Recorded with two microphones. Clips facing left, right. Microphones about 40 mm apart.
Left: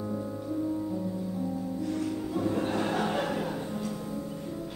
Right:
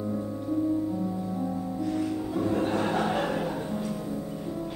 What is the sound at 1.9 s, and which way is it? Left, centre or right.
Music, centre.